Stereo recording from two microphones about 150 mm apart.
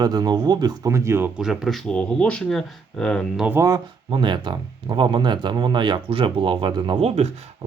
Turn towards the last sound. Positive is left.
turn(degrees=-45)  # may be behind; listen again after turning